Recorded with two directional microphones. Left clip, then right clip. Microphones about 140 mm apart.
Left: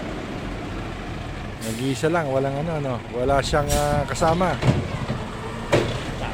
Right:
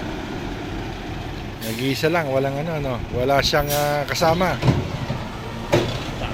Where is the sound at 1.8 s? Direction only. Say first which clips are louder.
Right 2 dB; 15° left (ahead or behind).